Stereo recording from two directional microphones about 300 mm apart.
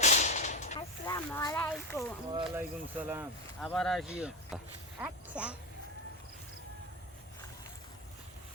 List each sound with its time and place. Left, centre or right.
0.0 s whip: left
0.8 s a sound: centre
2.3 s speech: centre